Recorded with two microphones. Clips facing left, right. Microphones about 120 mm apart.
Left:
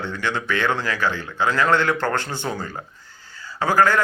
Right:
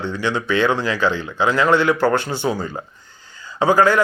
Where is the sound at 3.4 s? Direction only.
20° right (ahead or behind).